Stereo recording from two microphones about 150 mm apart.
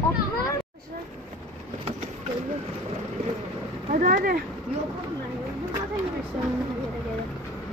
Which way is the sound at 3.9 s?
70° right (ahead or behind).